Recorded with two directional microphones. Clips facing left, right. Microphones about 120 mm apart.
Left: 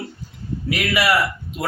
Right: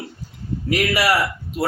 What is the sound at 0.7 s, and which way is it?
Speech, 40° right (ahead or behind).